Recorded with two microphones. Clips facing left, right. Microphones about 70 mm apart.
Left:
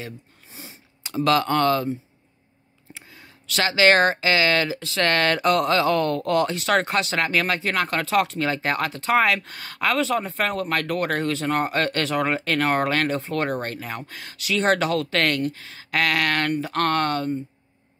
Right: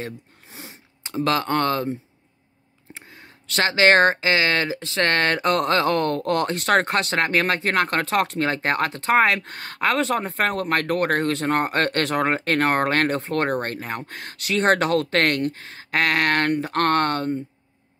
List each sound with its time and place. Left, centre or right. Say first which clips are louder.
0.5 s a sound: right 2 dB; right
1.0 s speech: left 2 dB; right
2.9 s speech: right 2 dB; right